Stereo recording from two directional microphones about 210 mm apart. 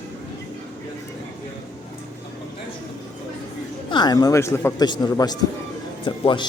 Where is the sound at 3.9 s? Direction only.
20° left (ahead or behind).